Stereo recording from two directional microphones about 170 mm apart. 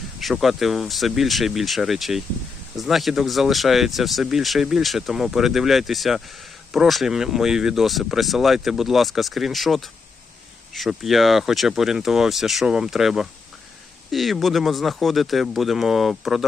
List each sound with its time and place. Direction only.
0.2 s speech: centre (ahead or behind)